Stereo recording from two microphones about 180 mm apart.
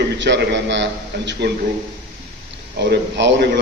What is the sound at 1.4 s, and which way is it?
Speech, 70° right (ahead or behind).